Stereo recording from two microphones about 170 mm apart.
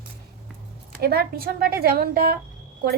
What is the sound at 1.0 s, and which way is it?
Child singing, 65° right (ahead or behind).